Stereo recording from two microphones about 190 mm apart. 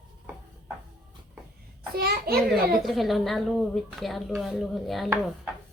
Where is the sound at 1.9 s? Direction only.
55° right (ahead or behind).